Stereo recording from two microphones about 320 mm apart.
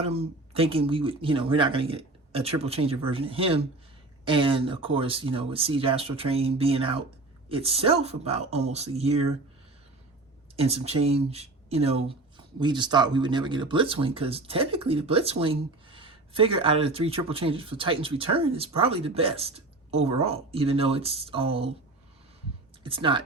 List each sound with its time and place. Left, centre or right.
0.0 s speech: centre
10.6 s speech: centre
22.8 s speech: centre